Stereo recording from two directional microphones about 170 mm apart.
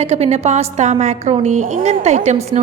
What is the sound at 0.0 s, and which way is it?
A woman's voice, 40° right (ahead or behind).